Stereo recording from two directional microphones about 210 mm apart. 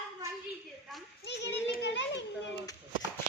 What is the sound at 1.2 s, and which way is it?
Children playing, 55° left (ahead or behind).